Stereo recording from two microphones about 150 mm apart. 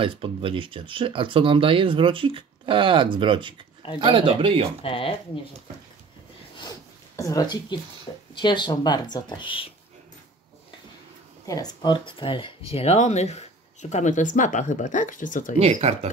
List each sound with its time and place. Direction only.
0.0 s speech: 35° right (ahead or behind)
4.8 s speech: 35° left (ahead or behind)
7.2 s speech: 20° left (ahead or behind)
11.4 s speech: 25° left (ahead or behind)
12.7 s speech: 45° left (ahead or behind)
15.6 s speech: 50° right (ahead or behind)